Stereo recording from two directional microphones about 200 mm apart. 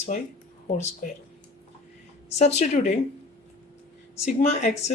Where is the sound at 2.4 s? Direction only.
35° left (ahead or behind).